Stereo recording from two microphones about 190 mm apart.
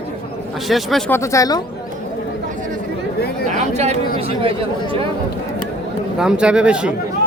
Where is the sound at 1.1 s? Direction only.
15° left (ahead or behind).